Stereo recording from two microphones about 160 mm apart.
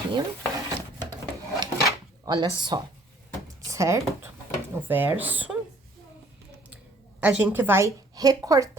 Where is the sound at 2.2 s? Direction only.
25° right (ahead or behind); by 5.5 s 10° right (ahead or behind).